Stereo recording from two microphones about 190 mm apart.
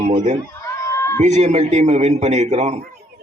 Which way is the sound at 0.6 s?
15° left (ahead or behind).